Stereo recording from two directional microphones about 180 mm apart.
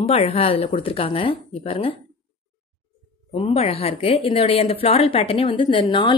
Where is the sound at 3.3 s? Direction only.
35° left (ahead or behind).